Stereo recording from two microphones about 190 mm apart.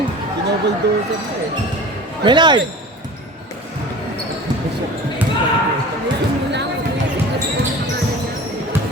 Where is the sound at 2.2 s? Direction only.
25° right (ahead or behind).